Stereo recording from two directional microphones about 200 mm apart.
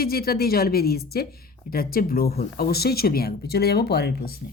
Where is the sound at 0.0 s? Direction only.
50° left (ahead or behind).